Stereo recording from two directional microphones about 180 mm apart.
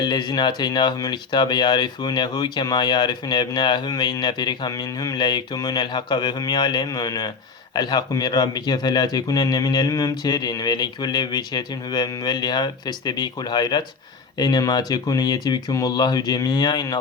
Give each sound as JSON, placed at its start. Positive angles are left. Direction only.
{"t": 0.0, "sound": "speech", "side_deg": 25}